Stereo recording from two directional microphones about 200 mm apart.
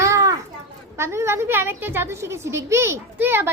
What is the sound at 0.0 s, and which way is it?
Children playing, 15° right (ahead or behind).